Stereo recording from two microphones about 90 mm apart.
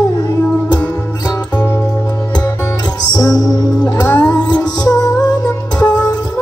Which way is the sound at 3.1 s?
45° left (ahead or behind).